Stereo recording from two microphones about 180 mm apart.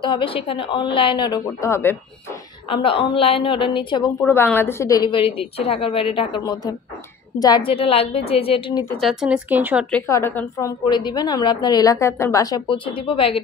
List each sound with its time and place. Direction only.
0.0 s a woman's voice: 30° left (ahead or behind)
2.7 s a woman's voice: 30° left (ahead or behind)
4.2 s a woman's voice: 10° left (ahead or behind); by 8.8 s 30° left (ahead or behind)
8.9 s speech: centre (ahead or behind)
10.0 s a woman's voice: 15° left (ahead or behind); by 13.4 s 30° left (ahead or behind)